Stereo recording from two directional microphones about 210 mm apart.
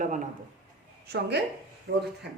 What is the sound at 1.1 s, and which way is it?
Speech, 50° right (ahead or behind).